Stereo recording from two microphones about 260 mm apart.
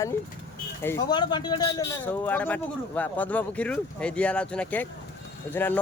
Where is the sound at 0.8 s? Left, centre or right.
Centre.